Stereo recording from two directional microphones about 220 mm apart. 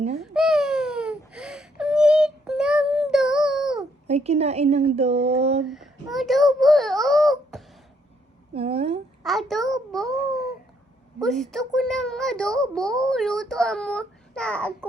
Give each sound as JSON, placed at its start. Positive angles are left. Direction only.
{"t": 0.2, "sound": "baby cry", "side_deg": 0}
{"t": 4.0, "sound": "a woman's voice", "side_deg": -30}
{"t": 5.6, "sound": "a child's voice", "side_deg": 0}
{"t": 8.5, "sound": "a woman's voice", "side_deg": -25}
{"t": 9.2, "sound": "a child's voice", "side_deg": 0}
{"t": 10.2, "sound": "babbling", "side_deg": 0}
{"t": 11.2, "sound": "a child's voice", "side_deg": 0}